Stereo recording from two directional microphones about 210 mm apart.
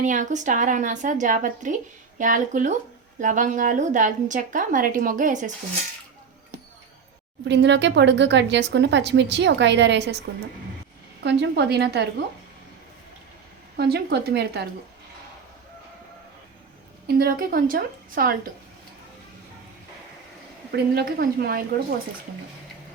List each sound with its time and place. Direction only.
0.0 s a woman's voice: 35° right (ahead or behind)
7.4 s speech: 55° right (ahead or behind)
11.2 s a woman's voice: 55° right (ahead or behind)
13.7 s a woman's voice: 50° right (ahead or behind)
17.1 s a woman's voice: 45° right (ahead or behind)
20.7 s a woman's voice: 45° right (ahead or behind)